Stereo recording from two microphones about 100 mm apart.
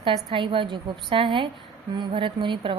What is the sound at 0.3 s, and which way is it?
A woman's voice, 60° right (ahead or behind).